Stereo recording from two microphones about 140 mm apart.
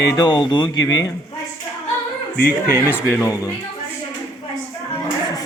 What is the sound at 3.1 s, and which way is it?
Speech, 20° left (ahead or behind).